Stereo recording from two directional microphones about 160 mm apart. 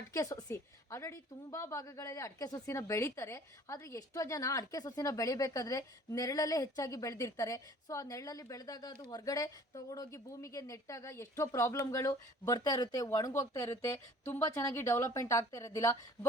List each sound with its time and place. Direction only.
0.1 s a woman's voice: 20° left (ahead or behind)